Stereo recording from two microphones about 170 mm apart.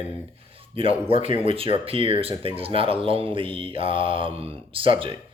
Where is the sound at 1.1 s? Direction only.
35° right (ahead or behind).